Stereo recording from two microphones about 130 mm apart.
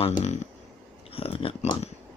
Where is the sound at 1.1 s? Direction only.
45° left (ahead or behind).